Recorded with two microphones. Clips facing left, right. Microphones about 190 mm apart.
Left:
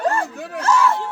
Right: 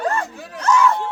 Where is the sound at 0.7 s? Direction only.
5° left (ahead or behind).